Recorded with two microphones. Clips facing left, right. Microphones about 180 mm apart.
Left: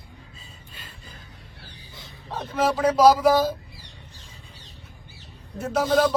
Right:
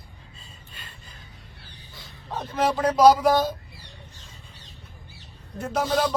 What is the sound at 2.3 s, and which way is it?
Speech, centre (ahead or behind).